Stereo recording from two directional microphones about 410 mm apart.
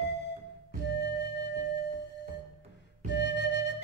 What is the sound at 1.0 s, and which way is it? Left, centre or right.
Music, left.